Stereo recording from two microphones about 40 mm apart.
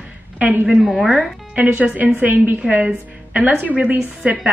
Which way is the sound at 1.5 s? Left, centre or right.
Right.